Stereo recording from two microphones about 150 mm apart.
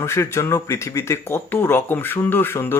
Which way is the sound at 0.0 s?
15° left (ahead or behind).